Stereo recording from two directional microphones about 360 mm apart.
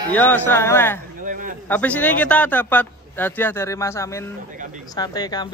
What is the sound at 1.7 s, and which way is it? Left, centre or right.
Speech, centre.